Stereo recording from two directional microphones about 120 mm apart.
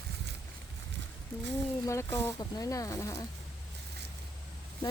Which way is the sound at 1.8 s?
25° left (ahead or behind).